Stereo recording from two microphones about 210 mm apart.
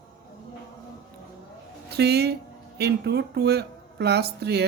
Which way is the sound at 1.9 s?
50° right (ahead or behind).